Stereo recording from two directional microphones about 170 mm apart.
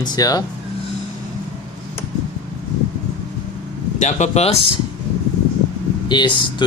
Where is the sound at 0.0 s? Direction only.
20° left (ahead or behind).